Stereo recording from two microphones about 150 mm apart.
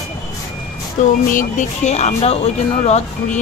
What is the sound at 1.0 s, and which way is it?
Speech, 55° left (ahead or behind).